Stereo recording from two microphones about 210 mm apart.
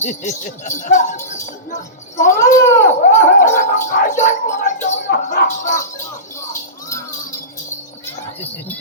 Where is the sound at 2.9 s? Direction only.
35° left (ahead or behind).